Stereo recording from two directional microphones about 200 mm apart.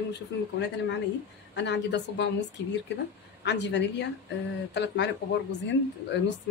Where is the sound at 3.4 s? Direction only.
60° left (ahead or behind).